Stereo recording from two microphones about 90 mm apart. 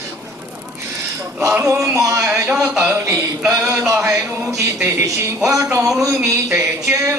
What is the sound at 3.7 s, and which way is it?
Speech, 30° right (ahead or behind).